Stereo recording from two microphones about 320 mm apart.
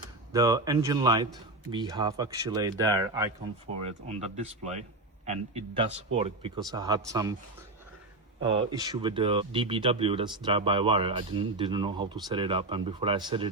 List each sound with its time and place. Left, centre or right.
0.3 s a man's voice: centre
4.0 s a man's voice: right
8.4 s a man's voice: centre